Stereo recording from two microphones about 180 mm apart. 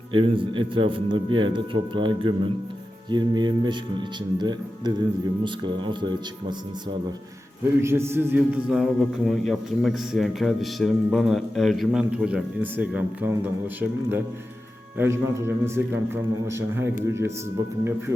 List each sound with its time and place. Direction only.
0.1 s a man's voice: 30° right (ahead or behind)
7.8 s a man's voice: 15° right (ahead or behind)
8.8 s a man's voice: centre (ahead or behind)
14.9 s a man's voice: 15° right (ahead or behind)